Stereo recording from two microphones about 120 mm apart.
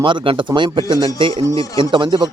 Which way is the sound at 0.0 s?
45° right (ahead or behind).